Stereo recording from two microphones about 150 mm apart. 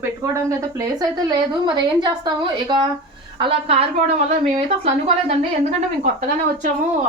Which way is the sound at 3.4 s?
40° right (ahead or behind).